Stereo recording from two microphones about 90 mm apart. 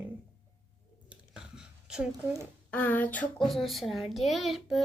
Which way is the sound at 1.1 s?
10° right (ahead or behind).